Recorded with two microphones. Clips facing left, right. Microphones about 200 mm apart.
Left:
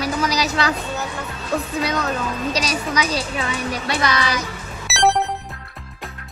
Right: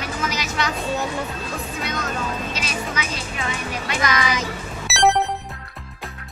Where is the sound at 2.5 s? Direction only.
35° left (ahead or behind).